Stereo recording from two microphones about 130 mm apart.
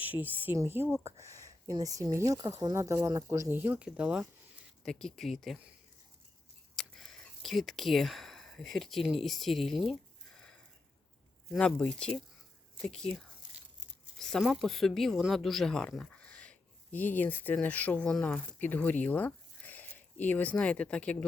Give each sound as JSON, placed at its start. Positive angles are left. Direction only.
{"t": 0.0, "sound": "a woman's voice", "side_deg": -15}
{"t": 3.6, "sound": "a woman's voice", "side_deg": -10}
{"t": 4.8, "sound": "speech", "side_deg": 5}
{"t": 6.7, "sound": "speech", "side_deg": 5}
{"t": 10.3, "sound": "a sound", "side_deg": 5}
{"t": 11.5, "sound": "speech", "side_deg": 5}
{"t": 14.2, "sound": "speech", "side_deg": 5}